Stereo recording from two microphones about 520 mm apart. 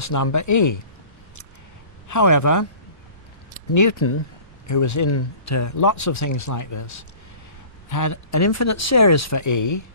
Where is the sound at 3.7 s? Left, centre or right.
Left.